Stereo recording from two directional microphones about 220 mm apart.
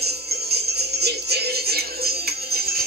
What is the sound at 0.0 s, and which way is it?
Music, 45° right (ahead or behind).